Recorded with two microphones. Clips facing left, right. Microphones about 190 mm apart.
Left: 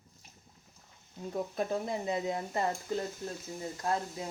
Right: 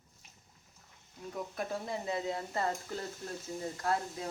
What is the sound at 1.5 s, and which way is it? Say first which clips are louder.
Speech: left 3 dB; 20° left (ahead or behind).